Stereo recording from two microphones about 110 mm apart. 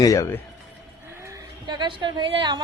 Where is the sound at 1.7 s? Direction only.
45° right (ahead or behind).